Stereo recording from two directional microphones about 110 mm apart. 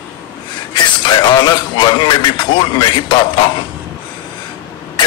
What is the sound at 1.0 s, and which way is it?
Speech, 45° left (ahead or behind).